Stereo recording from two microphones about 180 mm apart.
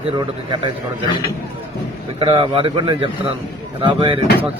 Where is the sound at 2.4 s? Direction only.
30° right (ahead or behind).